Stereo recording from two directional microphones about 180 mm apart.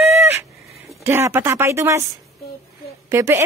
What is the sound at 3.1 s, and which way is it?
Speech, 15° right (ahead or behind).